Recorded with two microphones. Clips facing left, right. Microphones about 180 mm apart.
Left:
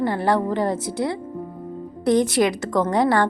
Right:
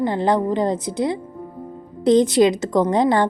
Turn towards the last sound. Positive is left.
turn(degrees=-20)  # may be behind; listen again after turning